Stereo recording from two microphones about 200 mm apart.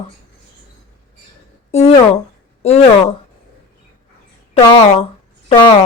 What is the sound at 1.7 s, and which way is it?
Speech, 30° left (ahead or behind).